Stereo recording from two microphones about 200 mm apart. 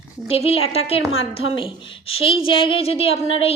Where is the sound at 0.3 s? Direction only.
30° left (ahead or behind).